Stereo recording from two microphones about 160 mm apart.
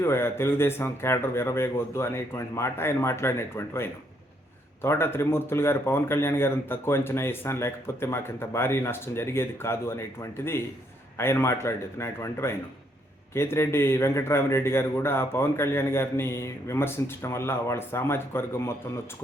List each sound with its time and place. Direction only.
0.0 s a man's voice: 15° left (ahead or behind)